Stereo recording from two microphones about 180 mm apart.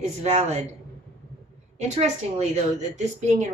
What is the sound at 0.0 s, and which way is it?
Speech, 40° right (ahead or behind).